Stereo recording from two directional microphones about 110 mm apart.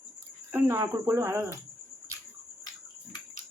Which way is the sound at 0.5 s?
25° right (ahead or behind).